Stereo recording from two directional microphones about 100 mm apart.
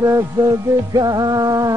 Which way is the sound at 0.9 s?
40° right (ahead or behind).